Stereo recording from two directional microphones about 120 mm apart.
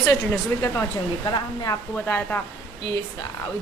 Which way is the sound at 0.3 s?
25° left (ahead or behind).